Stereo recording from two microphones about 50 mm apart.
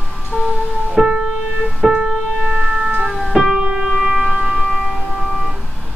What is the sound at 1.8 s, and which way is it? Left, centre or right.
Piano, right.